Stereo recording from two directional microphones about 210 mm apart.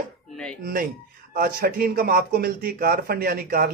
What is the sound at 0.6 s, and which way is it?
Speech, 40° right (ahead or behind).